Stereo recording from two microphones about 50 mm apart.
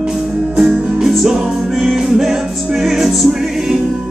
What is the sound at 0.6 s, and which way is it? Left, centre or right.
Music, centre.